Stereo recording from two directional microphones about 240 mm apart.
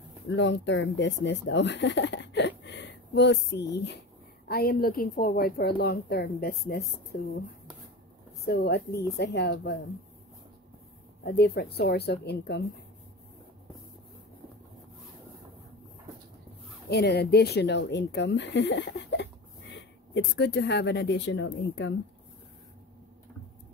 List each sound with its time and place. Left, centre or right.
0.3 s a woman's voice: left
8.5 s a woman's voice: left
11.2 s speech: left
16.9 s speech: left
20.3 s speech: left